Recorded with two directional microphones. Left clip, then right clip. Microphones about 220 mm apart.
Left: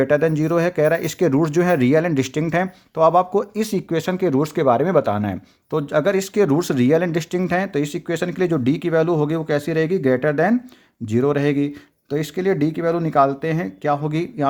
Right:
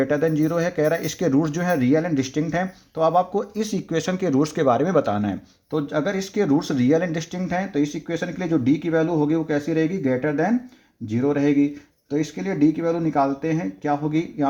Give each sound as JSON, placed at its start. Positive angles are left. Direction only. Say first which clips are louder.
{"t": 0.0, "sound": "speech", "louder": "left 3 dB", "side_deg": 30}